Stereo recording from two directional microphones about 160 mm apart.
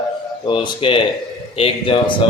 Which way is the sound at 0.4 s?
30° left (ahead or behind).